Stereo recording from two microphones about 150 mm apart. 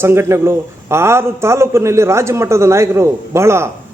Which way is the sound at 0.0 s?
15° right (ahead or behind).